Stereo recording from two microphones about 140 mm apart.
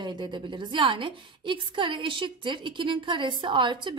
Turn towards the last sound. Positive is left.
turn(degrees=-35)  # may be behind; listen again after turning